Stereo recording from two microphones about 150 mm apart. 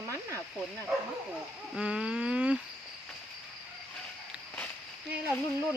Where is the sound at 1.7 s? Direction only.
5° right (ahead or behind).